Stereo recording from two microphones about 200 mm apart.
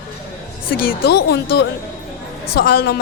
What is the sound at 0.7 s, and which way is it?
A woman's voice, 45° left (ahead or behind).